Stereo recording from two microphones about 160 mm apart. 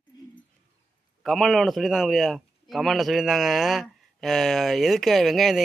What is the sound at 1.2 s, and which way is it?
A man's voice, centre (ahead or behind).